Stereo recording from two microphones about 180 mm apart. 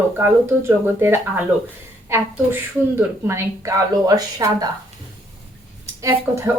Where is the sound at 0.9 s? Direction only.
10° right (ahead or behind).